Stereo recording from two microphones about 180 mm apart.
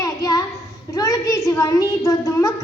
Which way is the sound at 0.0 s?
20° left (ahead or behind).